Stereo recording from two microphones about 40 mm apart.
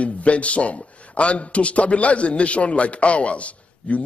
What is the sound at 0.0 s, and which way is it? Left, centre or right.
A man's voice, left.